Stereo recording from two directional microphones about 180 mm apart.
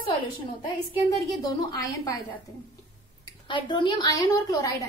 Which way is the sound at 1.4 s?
20° left (ahead or behind).